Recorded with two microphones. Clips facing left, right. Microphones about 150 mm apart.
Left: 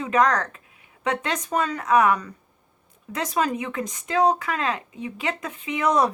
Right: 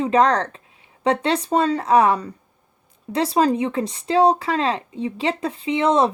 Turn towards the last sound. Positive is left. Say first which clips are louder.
# right 4 dB
turn(degrees=-25)  # may be behind; listen again after turning